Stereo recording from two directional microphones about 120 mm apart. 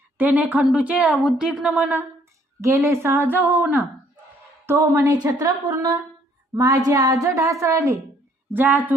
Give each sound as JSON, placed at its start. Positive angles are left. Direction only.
{"t": 0.2, "sound": "a woman's voice", "side_deg": -15}
{"t": 2.6, "sound": "a woman's voice", "side_deg": -25}
{"t": 8.5, "sound": "a woman's voice", "side_deg": -15}